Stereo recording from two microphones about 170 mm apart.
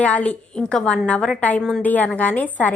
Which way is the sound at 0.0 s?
10° left (ahead or behind).